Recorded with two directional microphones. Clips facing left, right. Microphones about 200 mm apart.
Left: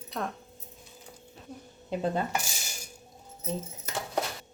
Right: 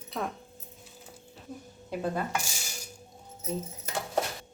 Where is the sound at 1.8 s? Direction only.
25° left (ahead or behind).